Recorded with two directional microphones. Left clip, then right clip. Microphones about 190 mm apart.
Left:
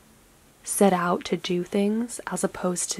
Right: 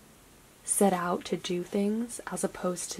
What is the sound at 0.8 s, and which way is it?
Speech, 25° left (ahead or behind).